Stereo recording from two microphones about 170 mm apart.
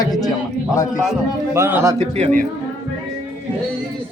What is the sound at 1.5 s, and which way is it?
Speech, 15° right (ahead or behind).